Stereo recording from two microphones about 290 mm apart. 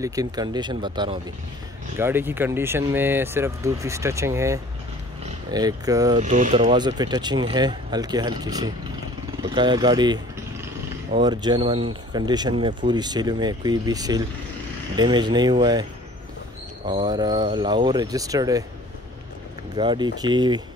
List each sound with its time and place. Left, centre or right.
0.0 s speech: centre
6.1 s speech: right
19.7 s speech: centre